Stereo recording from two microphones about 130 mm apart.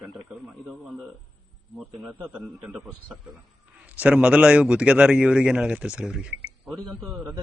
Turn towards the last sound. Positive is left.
turn(degrees=0)  # may be behind; listen again after turning